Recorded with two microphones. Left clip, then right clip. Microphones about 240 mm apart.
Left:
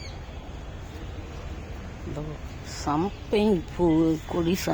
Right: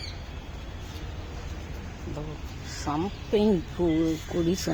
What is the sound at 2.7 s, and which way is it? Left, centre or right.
Speech, left.